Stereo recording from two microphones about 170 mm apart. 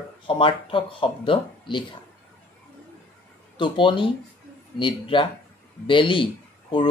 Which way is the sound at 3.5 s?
30° left (ahead or behind).